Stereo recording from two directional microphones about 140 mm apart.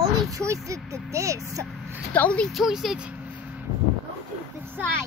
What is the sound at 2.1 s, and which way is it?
Speech, 10° left (ahead or behind).